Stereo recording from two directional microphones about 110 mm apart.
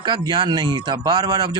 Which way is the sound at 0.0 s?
40° right (ahead or behind).